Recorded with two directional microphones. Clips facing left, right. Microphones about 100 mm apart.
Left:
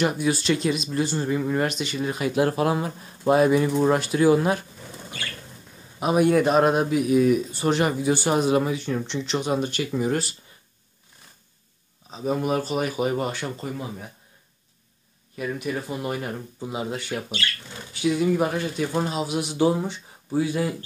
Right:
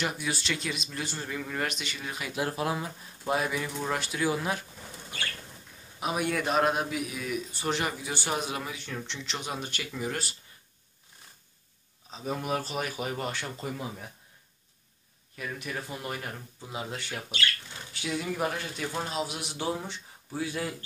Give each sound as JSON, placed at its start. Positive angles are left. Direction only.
{"t": 0.0, "sound": "speech", "side_deg": 45}
{"t": 2.3, "sound": "speech", "side_deg": 60}
{"t": 5.9, "sound": "speech", "side_deg": 40}
{"t": 12.4, "sound": "speech", "side_deg": 5}
{"t": 15.3, "sound": "speech", "side_deg": 10}